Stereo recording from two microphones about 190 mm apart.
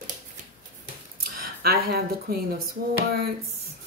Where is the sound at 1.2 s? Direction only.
55° right (ahead or behind).